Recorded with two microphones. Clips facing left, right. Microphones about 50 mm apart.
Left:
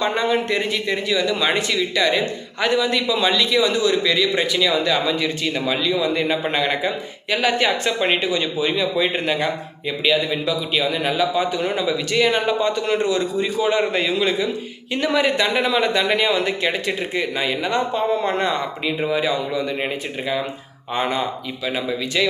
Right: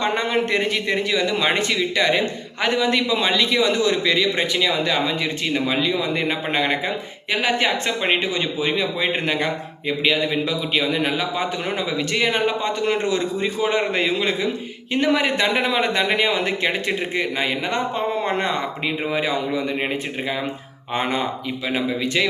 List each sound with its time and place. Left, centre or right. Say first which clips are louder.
0.2 s speech: left 1 dB; right
20.9 s speech: left 1 dB; right